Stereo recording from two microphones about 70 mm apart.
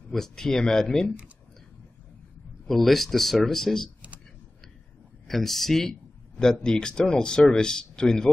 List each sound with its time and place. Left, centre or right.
0.1 s speech: centre
1.0 s speech: centre
2.6 s speech: centre
5.3 s speech: centre